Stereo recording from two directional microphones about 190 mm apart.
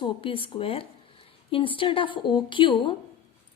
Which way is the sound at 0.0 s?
30° left (ahead or behind).